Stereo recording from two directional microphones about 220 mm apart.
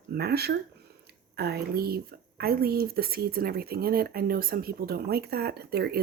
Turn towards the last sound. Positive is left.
turn(degrees=-45)  # may be behind; listen again after turning